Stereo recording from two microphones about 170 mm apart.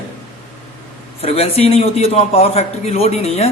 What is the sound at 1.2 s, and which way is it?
Speech, 35° left (ahead or behind).